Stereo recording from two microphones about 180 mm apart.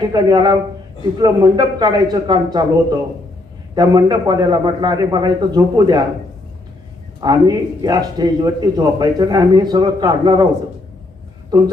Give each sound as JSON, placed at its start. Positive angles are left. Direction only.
{"t": 0.1, "sound": "a man's voice", "side_deg": -25}
{"t": 7.2, "sound": "a man's voice", "side_deg": -20}